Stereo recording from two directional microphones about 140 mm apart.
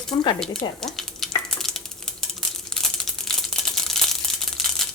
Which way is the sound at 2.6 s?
5° left (ahead or behind).